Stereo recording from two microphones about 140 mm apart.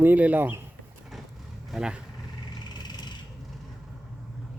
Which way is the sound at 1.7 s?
5° right (ahead or behind).